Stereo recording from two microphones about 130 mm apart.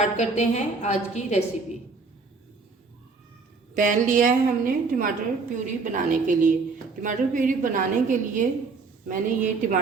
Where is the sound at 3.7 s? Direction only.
90° right.